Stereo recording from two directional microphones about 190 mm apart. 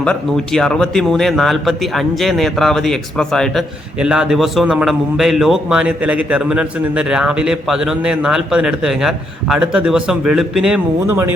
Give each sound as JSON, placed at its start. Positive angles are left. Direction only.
{"t": 0.0, "sound": "a man's voice", "side_deg": 5}